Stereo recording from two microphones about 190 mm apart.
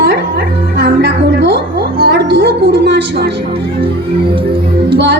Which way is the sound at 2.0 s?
55° right (ahead or behind).